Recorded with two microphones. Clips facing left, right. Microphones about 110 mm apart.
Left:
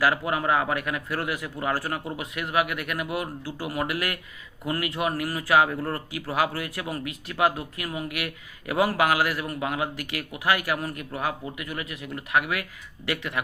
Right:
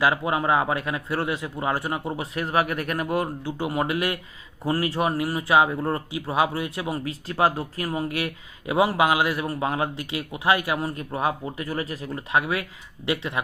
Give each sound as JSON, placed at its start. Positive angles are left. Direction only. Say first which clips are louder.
{"t": 0.0, "sound": "speech", "louder": "right 2 dB", "side_deg": -20}
{"t": 3.4, "sound": "speech", "louder": "right 4 dB", "side_deg": -25}